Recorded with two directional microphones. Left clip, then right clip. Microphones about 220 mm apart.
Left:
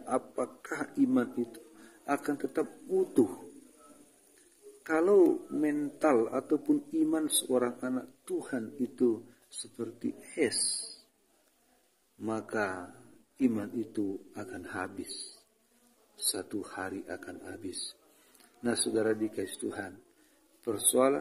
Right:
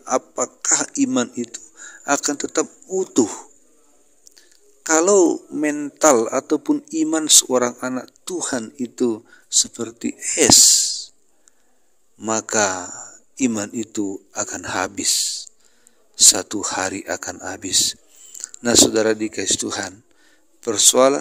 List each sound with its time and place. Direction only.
0.0 s a man's voice: 45° right (ahead or behind)
4.8 s a man's voice: 45° right (ahead or behind)
12.2 s a man's voice: 50° right (ahead or behind)
16.3 s a man's voice: 50° right (ahead or behind)